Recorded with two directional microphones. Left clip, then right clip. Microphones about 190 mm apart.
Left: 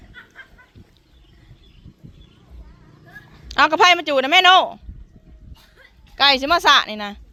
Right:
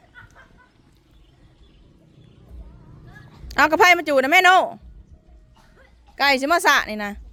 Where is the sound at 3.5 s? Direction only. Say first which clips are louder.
Left 1 dB; 25° right (ahead or behind).